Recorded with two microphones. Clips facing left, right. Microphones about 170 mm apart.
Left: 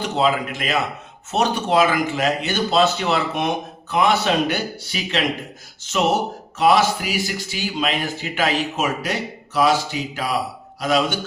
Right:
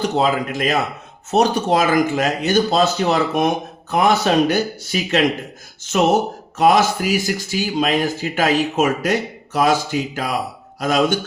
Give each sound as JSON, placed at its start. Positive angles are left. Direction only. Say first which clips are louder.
{"t": 0.2, "sound": "a man's voice", "louder": "even", "side_deg": -40}
{"t": 6.6, "sound": "a man's voice", "louder": "right 2 dB", "side_deg": -45}